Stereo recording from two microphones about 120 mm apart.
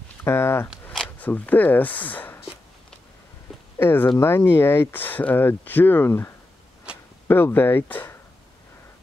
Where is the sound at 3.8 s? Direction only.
20° left (ahead or behind).